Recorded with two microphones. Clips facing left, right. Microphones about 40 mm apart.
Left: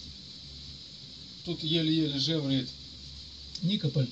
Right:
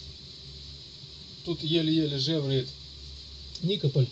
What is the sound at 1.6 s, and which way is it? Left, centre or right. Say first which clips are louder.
A man's voice: right 2 dB; right.